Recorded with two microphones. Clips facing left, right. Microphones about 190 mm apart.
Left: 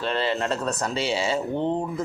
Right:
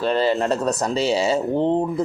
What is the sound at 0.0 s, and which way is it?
Speech, 40° right (ahead or behind).